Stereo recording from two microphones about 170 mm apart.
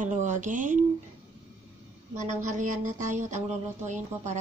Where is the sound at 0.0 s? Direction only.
45° right (ahead or behind).